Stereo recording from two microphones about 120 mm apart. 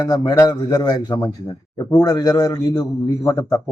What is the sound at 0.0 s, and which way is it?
A man's voice, 30° left (ahead or behind).